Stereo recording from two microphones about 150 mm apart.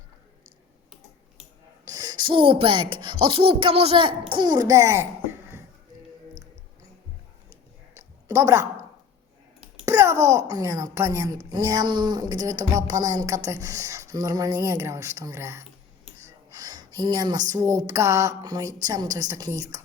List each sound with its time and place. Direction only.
2.0 s speech: 30° right (ahead or behind)
7.9 s a sound: 20° right (ahead or behind)
9.8 s a child's voice: 20° right (ahead or behind)